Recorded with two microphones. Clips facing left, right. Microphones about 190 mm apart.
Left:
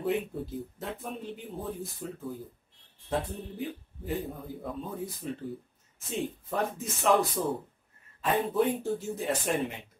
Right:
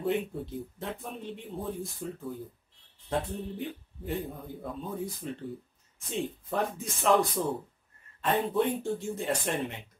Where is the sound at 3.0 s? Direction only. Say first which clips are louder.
Even; centre (ahead or behind).